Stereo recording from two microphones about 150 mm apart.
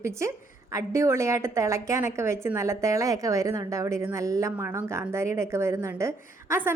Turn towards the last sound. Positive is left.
turn(degrees=-15)  # may be behind; listen again after turning